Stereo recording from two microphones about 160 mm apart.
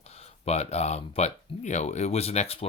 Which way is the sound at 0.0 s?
40° left (ahead or behind).